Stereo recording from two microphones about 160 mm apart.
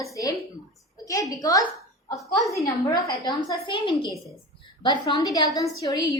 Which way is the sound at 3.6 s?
35° left (ahead or behind).